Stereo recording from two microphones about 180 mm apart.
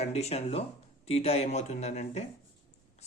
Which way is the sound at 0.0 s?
35° left (ahead or behind).